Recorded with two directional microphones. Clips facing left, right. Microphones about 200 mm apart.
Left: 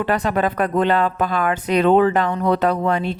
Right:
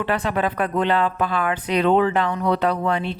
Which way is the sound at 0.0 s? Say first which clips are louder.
Left 3 dB; 45° left (ahead or behind).